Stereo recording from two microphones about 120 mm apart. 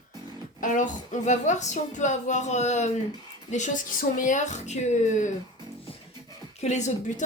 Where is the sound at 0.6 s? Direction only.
90° left.